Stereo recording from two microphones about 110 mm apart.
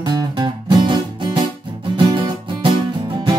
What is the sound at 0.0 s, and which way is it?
Music, 40° right (ahead or behind).